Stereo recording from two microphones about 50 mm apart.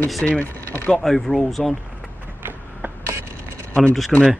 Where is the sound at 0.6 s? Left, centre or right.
Left.